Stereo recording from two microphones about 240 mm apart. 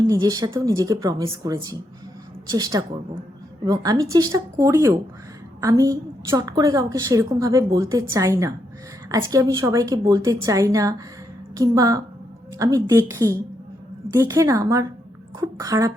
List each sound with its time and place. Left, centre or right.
0.1 s a woman's voice: centre